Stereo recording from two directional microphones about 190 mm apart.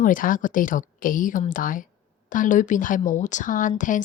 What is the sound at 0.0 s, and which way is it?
A woman's voice, 45° left (ahead or behind).